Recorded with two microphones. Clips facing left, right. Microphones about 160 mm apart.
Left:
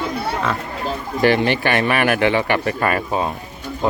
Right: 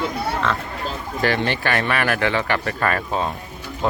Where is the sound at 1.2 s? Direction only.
15° left (ahead or behind).